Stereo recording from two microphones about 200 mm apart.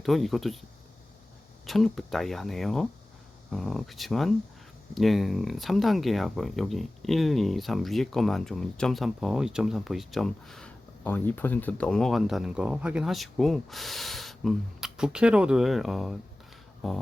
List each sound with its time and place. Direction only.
0.0 s speech: centre (ahead or behind)
1.6 s speech: centre (ahead or behind)